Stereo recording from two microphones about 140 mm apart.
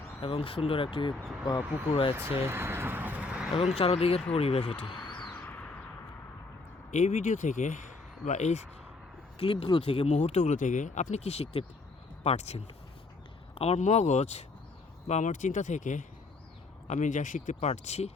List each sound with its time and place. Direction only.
0.2 s speech: 40° left (ahead or behind)
1.1 s speech: centre (ahead or behind)
1.5 s speech: 35° left (ahead or behind)
2.1 s vehicle: 15° right (ahead or behind)
3.8 s speech: 45° left (ahead or behind)
5.3 s a sound: 15° left (ahead or behind)
6.9 s speech: 65° left (ahead or behind)
9.4 s speech: 40° left (ahead or behind)
10.1 s speech: 55° left (ahead or behind)